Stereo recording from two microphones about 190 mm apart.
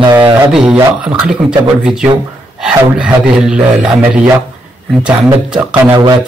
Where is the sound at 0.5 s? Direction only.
5° right (ahead or behind).